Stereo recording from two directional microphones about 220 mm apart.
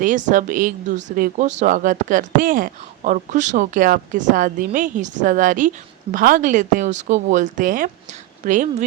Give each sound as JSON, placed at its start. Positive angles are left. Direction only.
{"t": 0.0, "sound": "speech", "side_deg": -35}